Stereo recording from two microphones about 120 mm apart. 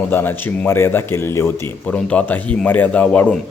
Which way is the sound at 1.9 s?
10° left (ahead or behind).